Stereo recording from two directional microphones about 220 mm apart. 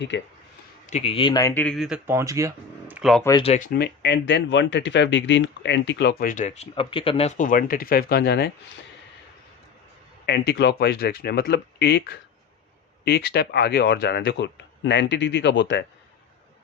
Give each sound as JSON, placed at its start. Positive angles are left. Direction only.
{"t": 0.1, "sound": "speech", "side_deg": 55}
{"t": 0.9, "sound": "speech", "side_deg": 30}
{"t": 3.2, "sound": "speech", "side_deg": 20}
{"t": 3.7, "sound": "speech", "side_deg": 50}
{"t": 10.2, "sound": "speech", "side_deg": 50}